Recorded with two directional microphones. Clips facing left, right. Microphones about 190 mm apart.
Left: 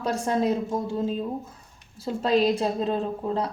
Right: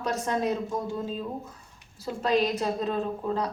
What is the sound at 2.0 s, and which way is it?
A woman's voice, 30° left (ahead or behind).